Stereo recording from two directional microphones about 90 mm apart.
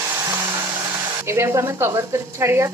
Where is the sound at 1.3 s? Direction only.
30° right (ahead or behind).